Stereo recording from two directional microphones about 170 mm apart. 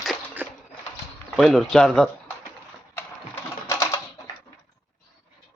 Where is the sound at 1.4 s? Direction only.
Centre (ahead or behind).